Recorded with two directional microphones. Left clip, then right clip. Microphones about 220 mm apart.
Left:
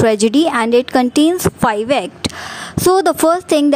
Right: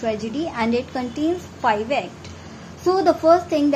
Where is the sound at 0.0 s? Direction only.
50° left (ahead or behind).